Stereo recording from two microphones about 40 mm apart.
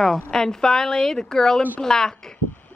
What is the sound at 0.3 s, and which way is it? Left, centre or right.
A woman's voice, centre.